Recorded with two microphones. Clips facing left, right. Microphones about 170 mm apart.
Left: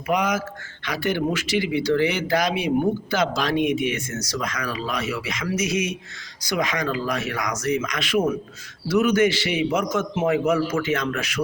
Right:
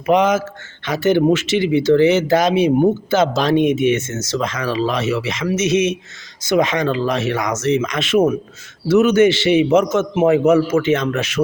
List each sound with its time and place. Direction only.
0.1 s speech: 25° right (ahead or behind)